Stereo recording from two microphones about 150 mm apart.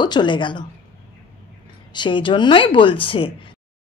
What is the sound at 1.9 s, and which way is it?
Speech, 30° left (ahead or behind).